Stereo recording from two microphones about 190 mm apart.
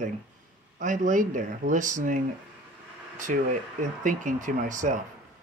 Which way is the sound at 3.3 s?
45° right (ahead or behind).